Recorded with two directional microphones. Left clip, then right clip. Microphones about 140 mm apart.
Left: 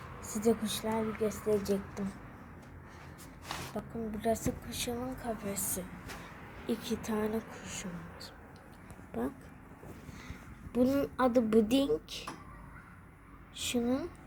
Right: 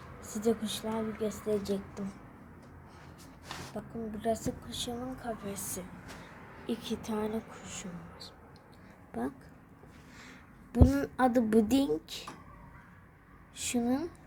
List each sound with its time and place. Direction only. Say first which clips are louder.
0.2 s a woman's voice: left 1 dB; 5° left (ahead or behind)
3.8 s a woman's voice: left 1 dB; centre (ahead or behind)
9.1 s speech: even; 15° right (ahead or behind)
10.2 s a woman's voice: left 2 dB; 35° right (ahead or behind)
13.6 s a woman's voice: even; 30° right (ahead or behind)